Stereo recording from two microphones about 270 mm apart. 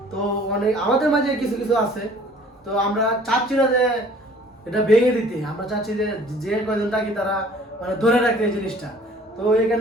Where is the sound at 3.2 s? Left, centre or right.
Centre.